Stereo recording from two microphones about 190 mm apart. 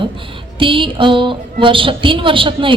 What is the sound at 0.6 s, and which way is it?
A woman's voice, 25° right (ahead or behind).